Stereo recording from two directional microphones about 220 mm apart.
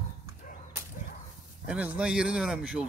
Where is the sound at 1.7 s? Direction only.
5° right (ahead or behind).